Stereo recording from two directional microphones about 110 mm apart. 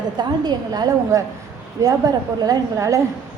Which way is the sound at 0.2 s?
40° right (ahead or behind).